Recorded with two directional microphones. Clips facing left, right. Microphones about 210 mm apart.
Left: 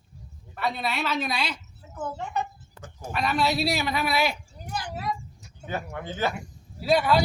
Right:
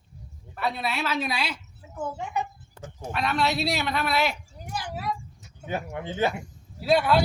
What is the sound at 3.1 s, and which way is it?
Speech, centre (ahead or behind).